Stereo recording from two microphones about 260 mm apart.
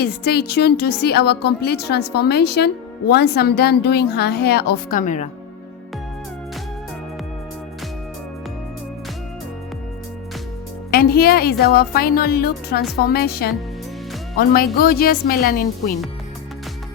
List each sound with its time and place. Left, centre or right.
0.0 s a woman's voice: left
10.9 s a woman's voice: left